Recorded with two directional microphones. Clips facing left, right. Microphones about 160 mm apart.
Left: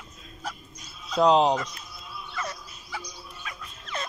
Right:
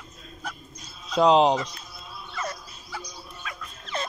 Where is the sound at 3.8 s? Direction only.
30° right (ahead or behind).